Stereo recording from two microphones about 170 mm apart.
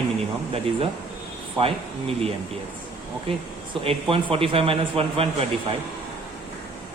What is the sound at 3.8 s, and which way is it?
A man's voice, 35° right (ahead or behind).